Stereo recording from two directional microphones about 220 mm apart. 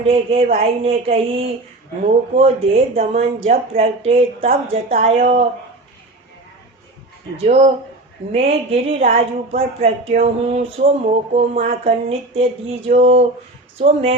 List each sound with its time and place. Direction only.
0.0 s speech: 25° right (ahead or behind)
7.4 s speech: 30° right (ahead or behind)